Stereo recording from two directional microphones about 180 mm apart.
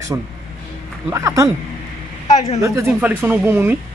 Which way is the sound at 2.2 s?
20° left (ahead or behind).